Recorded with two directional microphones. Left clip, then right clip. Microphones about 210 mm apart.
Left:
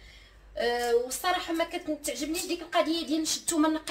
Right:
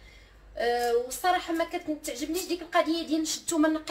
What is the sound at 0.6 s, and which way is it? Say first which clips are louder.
Speech: even; 15° left (ahead or behind).